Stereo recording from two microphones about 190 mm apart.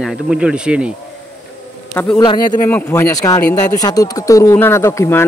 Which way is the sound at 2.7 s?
10° left (ahead or behind).